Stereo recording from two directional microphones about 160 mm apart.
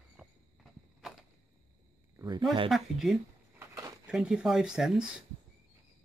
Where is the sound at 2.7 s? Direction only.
Centre (ahead or behind).